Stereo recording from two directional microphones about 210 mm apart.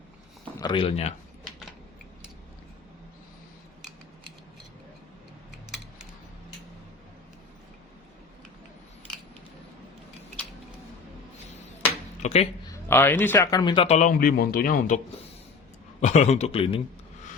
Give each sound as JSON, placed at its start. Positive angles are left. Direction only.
{"t": 0.6, "sound": "speech", "side_deg": 25}
{"t": 12.2, "sound": "a sound", "side_deg": 30}
{"t": 12.7, "sound": "speech", "side_deg": 10}